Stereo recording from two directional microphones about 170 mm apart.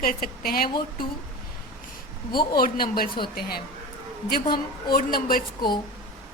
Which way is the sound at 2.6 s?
60° left (ahead or behind).